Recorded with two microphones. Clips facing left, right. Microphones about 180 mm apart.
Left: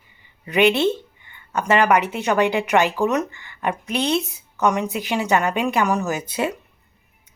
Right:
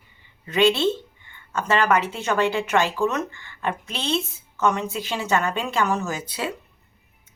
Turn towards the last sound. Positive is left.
turn(degrees=20)  # may be behind; listen again after turning